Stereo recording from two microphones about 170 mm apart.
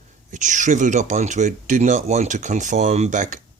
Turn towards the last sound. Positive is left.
turn(degrees=-45)  # may be behind; listen again after turning